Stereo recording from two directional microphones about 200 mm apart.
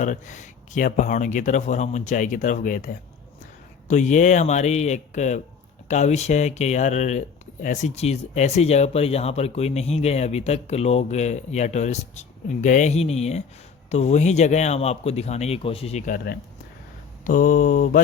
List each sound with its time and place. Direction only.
0.0 s speech: 40° left (ahead or behind)